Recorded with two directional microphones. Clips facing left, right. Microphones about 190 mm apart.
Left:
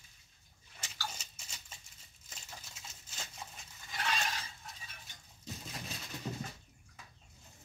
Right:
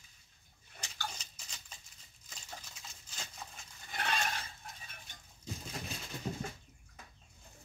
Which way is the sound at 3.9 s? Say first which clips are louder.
Right 1 dB; 50° right (ahead or behind).